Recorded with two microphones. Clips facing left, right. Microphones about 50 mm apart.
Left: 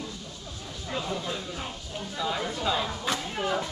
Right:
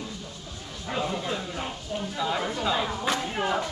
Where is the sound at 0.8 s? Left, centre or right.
Right.